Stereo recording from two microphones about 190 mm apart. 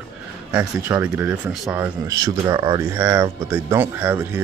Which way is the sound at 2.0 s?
20° right (ahead or behind).